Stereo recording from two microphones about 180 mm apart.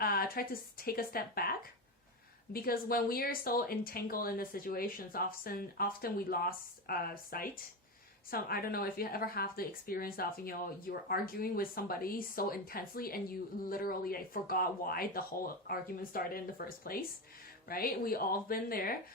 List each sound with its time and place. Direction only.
0.0 s speech: 55° left (ahead or behind)